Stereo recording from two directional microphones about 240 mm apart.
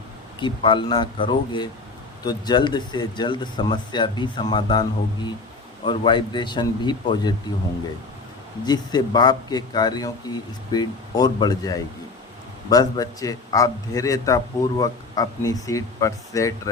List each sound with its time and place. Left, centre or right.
0.4 s speech: centre
8.6 s a man's voice: centre